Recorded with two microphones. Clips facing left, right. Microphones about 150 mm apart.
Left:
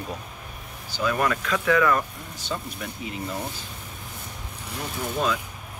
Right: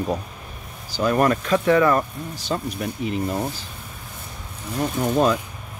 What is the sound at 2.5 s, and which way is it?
Speech, 50° right (ahead or behind).